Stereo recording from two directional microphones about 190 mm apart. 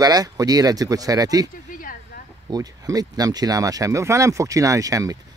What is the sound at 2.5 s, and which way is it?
Speech, 20° right (ahead or behind).